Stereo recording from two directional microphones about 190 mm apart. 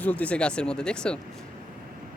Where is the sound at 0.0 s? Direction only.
5° left (ahead or behind).